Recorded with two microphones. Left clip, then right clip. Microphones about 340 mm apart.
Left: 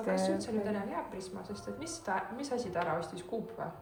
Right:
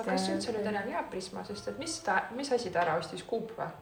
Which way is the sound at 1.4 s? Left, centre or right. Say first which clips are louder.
Right 4 dB; right.